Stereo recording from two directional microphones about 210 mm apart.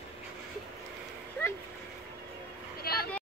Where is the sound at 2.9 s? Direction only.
45° left (ahead or behind).